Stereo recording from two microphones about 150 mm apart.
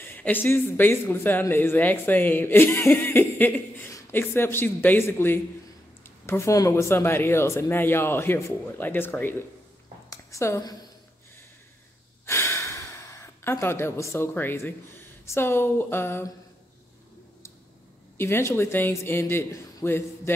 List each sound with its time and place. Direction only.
0.0 s speech: 10° left (ahead or behind)
10.0 s a sound: 20° left (ahead or behind)
12.3 s speech: 15° left (ahead or behind)
18.1 s speech: 15° left (ahead or behind)